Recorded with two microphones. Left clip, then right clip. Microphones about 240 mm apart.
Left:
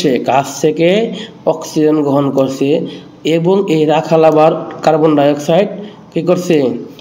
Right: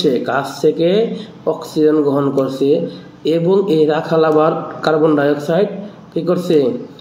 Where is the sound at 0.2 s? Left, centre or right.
Left.